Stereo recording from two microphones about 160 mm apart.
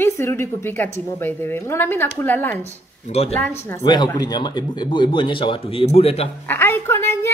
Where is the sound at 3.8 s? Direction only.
30° left (ahead or behind).